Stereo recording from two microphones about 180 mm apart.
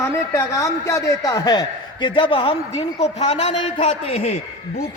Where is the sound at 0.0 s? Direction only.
15° left (ahead or behind).